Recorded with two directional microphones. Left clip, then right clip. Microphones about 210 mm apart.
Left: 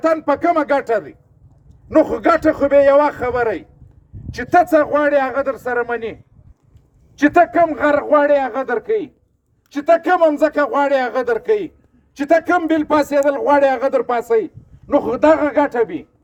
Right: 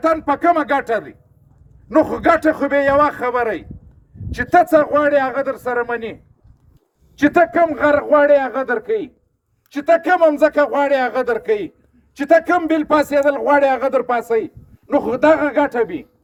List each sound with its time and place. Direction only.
0.0 s a man's voice: 10° left (ahead or behind)
7.3 s a man's voice: 25° left (ahead or behind)
8.3 s a man's voice: 10° left (ahead or behind)